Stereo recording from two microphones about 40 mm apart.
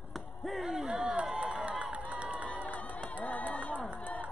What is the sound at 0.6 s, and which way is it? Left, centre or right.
Battle cry, centre.